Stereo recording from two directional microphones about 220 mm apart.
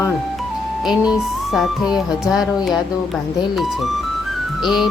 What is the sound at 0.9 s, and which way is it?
Speech, centre (ahead or behind).